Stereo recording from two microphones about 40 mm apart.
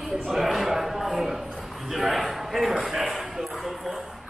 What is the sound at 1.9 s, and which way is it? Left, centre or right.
Speech, centre.